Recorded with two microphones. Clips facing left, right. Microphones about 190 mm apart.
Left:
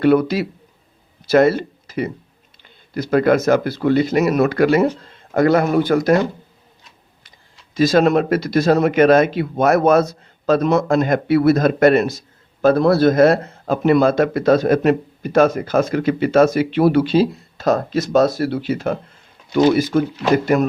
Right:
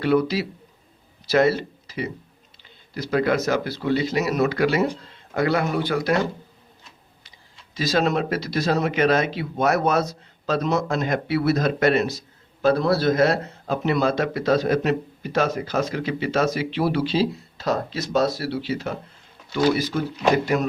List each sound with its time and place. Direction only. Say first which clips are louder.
0.0 s speech: left 6 dB; 55° left (ahead or behind)
7.7 s speech: left 8 dB; 50° left (ahead or behind)